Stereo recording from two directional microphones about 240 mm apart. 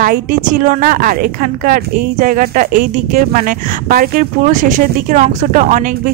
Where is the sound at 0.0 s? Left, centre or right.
Right.